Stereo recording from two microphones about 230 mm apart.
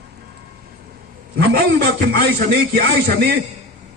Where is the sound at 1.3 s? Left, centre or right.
Right.